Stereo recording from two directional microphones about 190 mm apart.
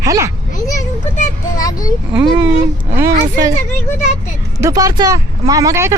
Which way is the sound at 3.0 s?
15° right (ahead or behind).